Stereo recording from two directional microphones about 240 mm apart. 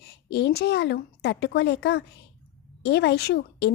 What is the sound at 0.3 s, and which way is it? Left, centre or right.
A woman's voice, left.